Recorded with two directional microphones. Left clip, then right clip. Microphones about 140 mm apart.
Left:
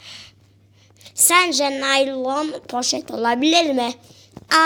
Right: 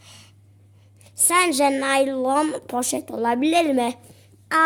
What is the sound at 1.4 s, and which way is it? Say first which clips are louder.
Speech: right 1 dB; 50° right (ahead or behind).